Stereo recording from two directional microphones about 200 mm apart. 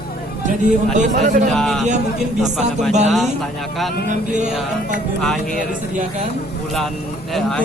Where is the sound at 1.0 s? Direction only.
40° right (ahead or behind).